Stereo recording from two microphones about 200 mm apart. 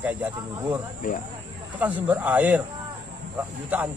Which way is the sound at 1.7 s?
5° right (ahead or behind).